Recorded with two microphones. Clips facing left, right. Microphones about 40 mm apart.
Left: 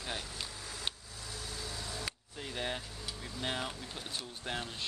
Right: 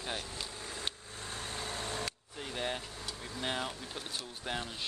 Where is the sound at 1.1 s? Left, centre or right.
Right.